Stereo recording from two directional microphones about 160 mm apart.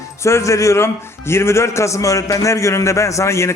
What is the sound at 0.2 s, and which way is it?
A man's voice, 15° left (ahead or behind).